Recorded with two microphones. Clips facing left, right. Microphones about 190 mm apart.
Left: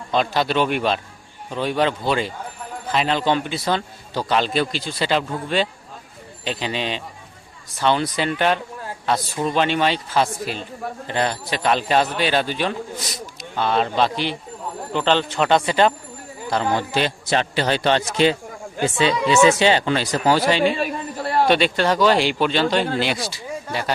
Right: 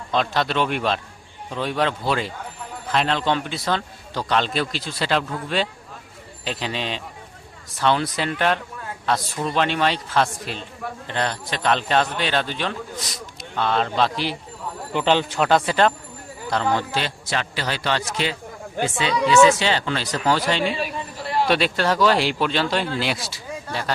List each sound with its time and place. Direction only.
0.1 s a man's voice: 5° left (ahead or behind)
14.9 s a man's voice: 10° right (ahead or behind)
16.5 s a man's voice: 10° left (ahead or behind)
20.7 s chatter: 50° left (ahead or behind)
21.4 s a man's voice: centre (ahead or behind)
23.6 s speech: 10° left (ahead or behind)